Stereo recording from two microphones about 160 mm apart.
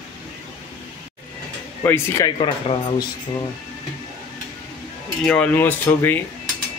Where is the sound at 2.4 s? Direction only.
30° left (ahead or behind).